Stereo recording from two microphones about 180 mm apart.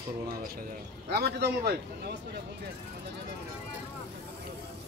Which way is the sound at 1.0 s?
65° right (ahead or behind).